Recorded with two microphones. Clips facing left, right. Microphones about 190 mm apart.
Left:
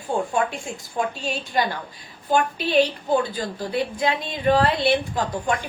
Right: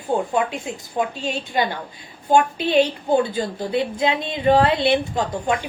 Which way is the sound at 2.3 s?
25° right (ahead or behind).